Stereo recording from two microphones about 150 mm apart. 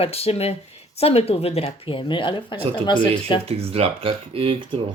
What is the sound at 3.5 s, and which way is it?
Speech, 40° right (ahead or behind).